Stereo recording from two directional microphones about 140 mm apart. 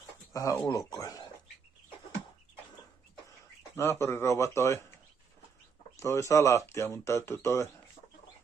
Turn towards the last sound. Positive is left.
turn(degrees=20)  # may be behind; listen again after turning